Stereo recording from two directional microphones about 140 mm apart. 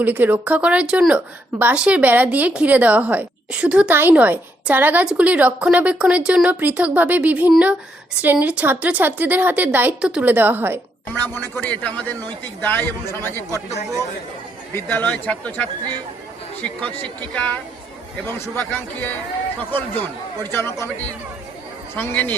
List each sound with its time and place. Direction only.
0.0 s speech: 10° right (ahead or behind)
11.5 s a man's voice: 10° left (ahead or behind)
14.8 s a man's voice: 15° left (ahead or behind)
16.8 s a man's voice: 10° left (ahead or behind)
20.4 s a man's voice: 15° left (ahead or behind)
21.9 s a man's voice: 10° left (ahead or behind)